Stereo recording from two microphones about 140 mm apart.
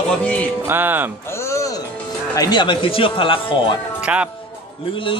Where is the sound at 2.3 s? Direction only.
30° left (ahead or behind).